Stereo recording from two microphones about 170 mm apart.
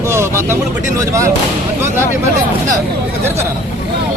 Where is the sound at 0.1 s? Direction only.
15° right (ahead or behind).